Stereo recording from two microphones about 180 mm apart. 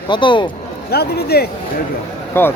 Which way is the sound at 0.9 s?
60° left (ahead or behind).